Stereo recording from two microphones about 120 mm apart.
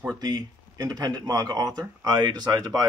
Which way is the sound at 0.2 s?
35° right (ahead or behind).